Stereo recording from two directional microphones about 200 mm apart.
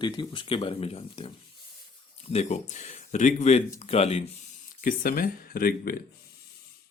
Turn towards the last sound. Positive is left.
turn(degrees=50)  # may be behind; listen again after turning